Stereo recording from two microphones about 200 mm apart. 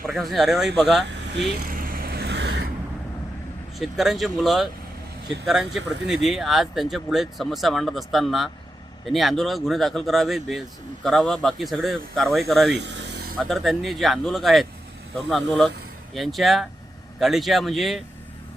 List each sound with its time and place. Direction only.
0.1 s speech: centre (ahead or behind)
1.1 s vehicle: 55° right (ahead or behind)
3.8 s speech: centre (ahead or behind)
12.7 s a sound: 60° right (ahead or behind)
13.4 s speech: centre (ahead or behind)